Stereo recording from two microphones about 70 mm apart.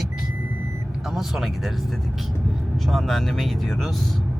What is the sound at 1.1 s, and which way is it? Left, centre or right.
Speech, centre.